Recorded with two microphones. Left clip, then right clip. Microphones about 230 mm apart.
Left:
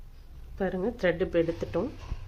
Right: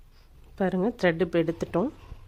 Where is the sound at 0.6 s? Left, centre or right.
Right.